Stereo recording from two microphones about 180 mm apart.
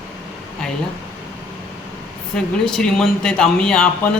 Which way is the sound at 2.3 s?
5° left (ahead or behind).